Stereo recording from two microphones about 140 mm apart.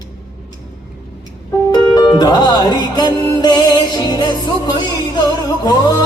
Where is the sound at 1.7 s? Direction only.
30° left (ahead or behind).